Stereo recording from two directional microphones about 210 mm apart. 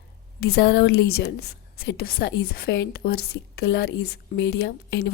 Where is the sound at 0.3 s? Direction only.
50° left (ahead or behind).